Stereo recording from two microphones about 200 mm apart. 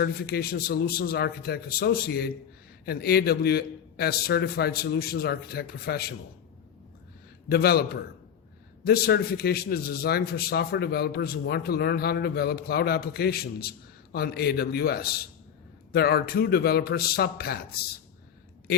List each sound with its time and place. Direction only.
0.0 s a man's voice: 50° left (ahead or behind)
7.4 s a man's voice: 50° left (ahead or behind)